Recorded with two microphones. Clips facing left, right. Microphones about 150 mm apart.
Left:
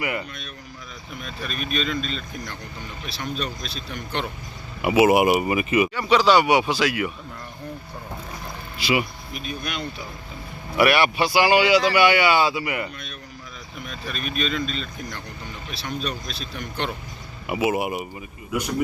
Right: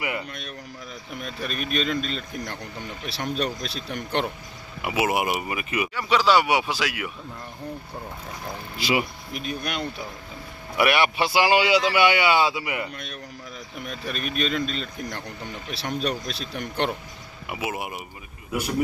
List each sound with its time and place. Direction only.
0.0 s speech: 20° right (ahead or behind)
1.5 s speech: 60° right (ahead or behind)
3.1 s speech: 70° right (ahead or behind)
4.8 s speech: 5° left (ahead or behind)
8.8 s speech: 40° right (ahead or behind)
9.3 s speech: 60° right (ahead or behind)
10.8 s speech: 20° right (ahead or behind)
13.8 s speech: 60° right (ahead or behind)
16.0 s speech: 65° right (ahead or behind)
17.4 s speech: 5° left (ahead or behind)